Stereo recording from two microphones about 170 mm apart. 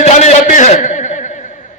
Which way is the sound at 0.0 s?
40° left (ahead or behind).